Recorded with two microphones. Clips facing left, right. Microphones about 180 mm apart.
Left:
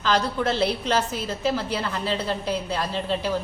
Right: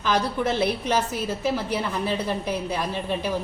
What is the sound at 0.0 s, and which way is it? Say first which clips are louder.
A woman's voice: even; 15° right (ahead or behind).